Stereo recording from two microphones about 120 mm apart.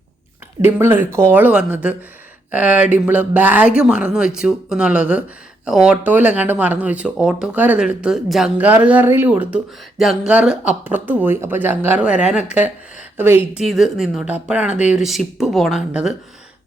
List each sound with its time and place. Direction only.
0.6 s speech: 20° right (ahead or behind)
13.6 s speech: centre (ahead or behind)
14.3 s speech: 15° right (ahead or behind)